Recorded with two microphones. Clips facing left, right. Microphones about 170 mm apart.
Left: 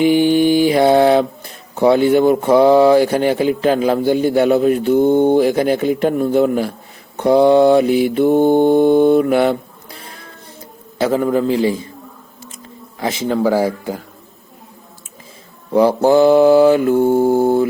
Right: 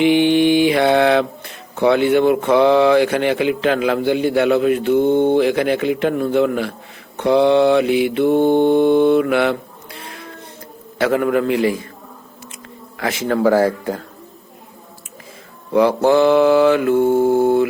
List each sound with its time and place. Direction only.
0.0 s mantra: 40° left (ahead or behind)
1.7 s speech: 40° left (ahead or behind)
9.2 s a sound: 40° left (ahead or behind)
11.0 s a man's voice: 30° left (ahead or behind)
13.1 s speech: 15° left (ahead or behind)
15.7 s speech: 35° left (ahead or behind)